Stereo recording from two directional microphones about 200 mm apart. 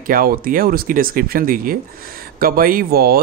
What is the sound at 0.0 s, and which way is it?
Speech, 45° right (ahead or behind).